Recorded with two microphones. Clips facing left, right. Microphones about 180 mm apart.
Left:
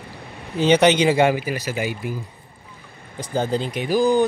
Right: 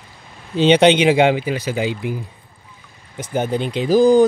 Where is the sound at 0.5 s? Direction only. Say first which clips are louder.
Right 3 dB; 25° right (ahead or behind); by 4.2 s 40° right (ahead or behind).